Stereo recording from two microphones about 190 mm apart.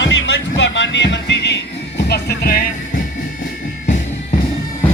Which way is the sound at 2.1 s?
55° left (ahead or behind).